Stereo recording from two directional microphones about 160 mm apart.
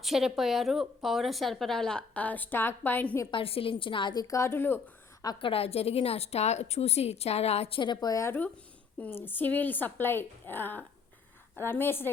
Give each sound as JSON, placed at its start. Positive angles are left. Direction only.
{"t": 0.0, "sound": "a woman's voice", "side_deg": 0}
{"t": 3.3, "sound": "a woman's voice", "side_deg": 35}
{"t": 5.2, "sound": "a woman's voice", "side_deg": 30}